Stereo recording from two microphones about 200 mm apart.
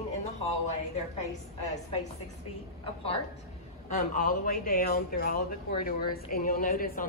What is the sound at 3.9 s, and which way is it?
A woman's voice, 40° left (ahead or behind).